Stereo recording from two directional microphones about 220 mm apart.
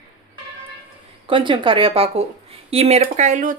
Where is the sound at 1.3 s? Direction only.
20° right (ahead or behind).